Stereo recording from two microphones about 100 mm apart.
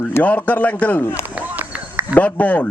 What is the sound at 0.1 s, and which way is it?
A man's voice, 15° left (ahead or behind).